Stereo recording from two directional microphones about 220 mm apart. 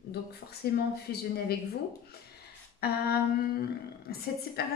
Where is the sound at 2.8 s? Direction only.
45° left (ahead or behind).